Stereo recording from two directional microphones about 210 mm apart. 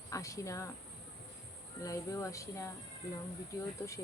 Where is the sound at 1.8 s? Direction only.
15° left (ahead or behind).